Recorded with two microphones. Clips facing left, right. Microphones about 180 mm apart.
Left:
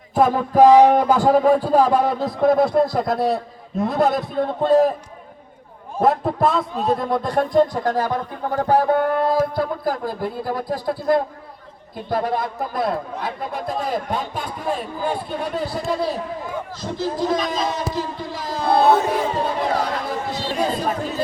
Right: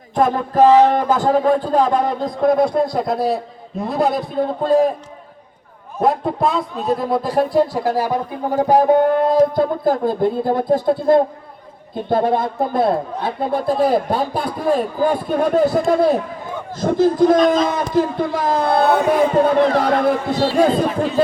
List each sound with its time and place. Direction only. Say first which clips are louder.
0.1 s a man's voice: even; 5° left (ahead or behind)
6.0 s a man's voice: right 1 dB; centre (ahead or behind); by 20.8 s 55° right (ahead or behind)